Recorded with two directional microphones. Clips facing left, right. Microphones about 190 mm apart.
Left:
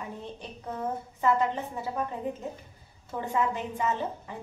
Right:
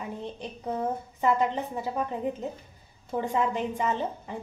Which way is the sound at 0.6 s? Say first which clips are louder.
Right 3 dB; 15° right (ahead or behind).